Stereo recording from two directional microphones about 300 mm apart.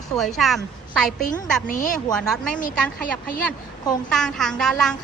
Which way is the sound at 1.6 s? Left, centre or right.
Left.